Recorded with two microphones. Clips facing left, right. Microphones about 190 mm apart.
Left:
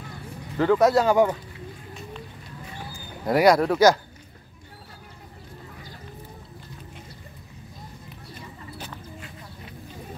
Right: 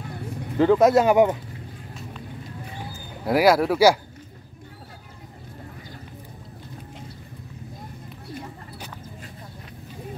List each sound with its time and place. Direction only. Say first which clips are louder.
0.6 s speech: right 2 dB; 20° right (ahead or behind)
2.9 s speech: right 1 dB; 5° right (ahead or behind)
8.7 s chicken: even; 10° right (ahead or behind)